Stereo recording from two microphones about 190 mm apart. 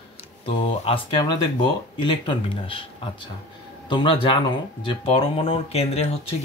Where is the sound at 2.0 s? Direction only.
25° left (ahead or behind).